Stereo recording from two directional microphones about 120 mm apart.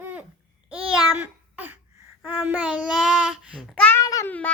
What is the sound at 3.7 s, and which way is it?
Speech, 10° left (ahead or behind).